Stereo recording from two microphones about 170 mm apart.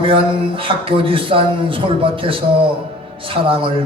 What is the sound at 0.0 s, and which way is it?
A man's voice, 30° right (ahead or behind).